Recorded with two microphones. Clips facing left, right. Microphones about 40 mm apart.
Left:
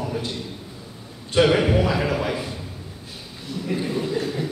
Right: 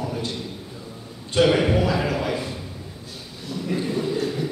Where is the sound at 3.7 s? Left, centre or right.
Centre.